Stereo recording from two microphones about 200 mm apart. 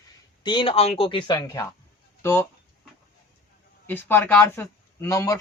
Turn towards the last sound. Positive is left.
turn(degrees=15)  # may be behind; listen again after turning